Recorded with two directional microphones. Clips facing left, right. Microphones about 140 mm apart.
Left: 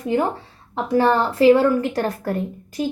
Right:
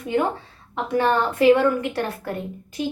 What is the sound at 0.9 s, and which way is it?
A woman's voice, 35° left (ahead or behind).